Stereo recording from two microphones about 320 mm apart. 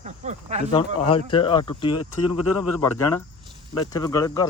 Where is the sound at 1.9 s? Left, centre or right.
Left.